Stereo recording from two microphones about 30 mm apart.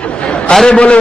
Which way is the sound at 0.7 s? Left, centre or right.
Left.